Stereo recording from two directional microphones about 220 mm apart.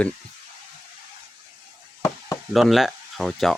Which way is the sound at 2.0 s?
15° left (ahead or behind).